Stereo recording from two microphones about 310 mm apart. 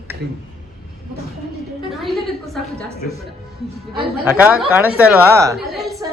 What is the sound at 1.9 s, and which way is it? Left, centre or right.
Speech, centre.